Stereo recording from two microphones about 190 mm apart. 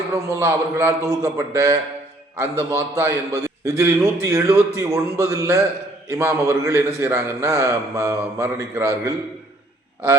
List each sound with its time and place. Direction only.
0.1 s a man's voice: 15° right (ahead or behind)